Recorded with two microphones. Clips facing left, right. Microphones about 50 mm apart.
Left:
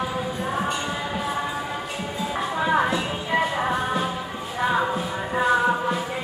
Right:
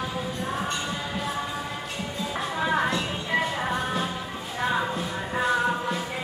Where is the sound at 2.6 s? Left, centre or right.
Centre.